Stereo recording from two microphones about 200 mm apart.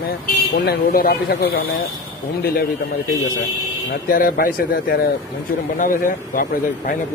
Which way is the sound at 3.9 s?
45° left (ahead or behind).